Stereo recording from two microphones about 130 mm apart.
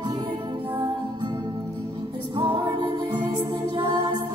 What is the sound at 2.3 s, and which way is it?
Music, 35° right (ahead or behind).